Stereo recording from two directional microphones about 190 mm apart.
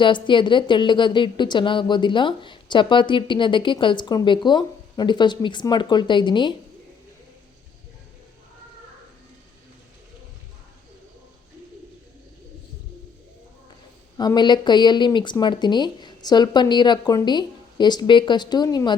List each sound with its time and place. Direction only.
0.0 s a woman's voice: 25° left (ahead or behind)
14.2 s a woman's voice: 20° left (ahead or behind)